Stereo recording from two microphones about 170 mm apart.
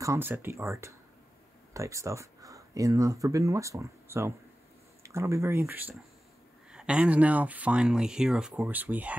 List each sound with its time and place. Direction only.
0.0 s speech: 15° right (ahead or behind)